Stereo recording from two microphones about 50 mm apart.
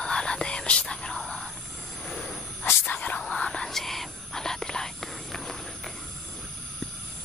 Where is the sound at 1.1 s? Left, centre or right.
Centre.